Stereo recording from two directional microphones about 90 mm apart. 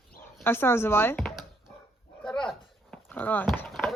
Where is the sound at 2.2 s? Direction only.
5° left (ahead or behind).